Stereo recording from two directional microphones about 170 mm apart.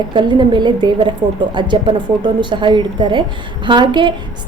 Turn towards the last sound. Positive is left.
turn(degrees=-25)  # may be behind; listen again after turning